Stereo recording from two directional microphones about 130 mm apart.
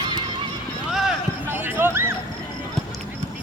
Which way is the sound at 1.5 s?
15° right (ahead or behind).